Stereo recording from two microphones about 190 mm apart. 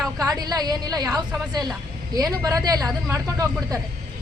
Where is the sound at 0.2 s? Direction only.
20° right (ahead or behind).